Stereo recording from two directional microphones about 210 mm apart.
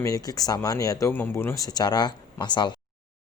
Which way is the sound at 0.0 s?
15° left (ahead or behind).